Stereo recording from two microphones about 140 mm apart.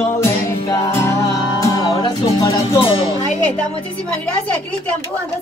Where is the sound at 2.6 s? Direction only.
40° left (ahead or behind).